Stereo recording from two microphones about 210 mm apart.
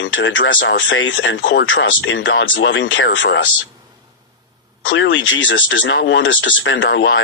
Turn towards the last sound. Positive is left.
turn(degrees=65)  # may be behind; listen again after turning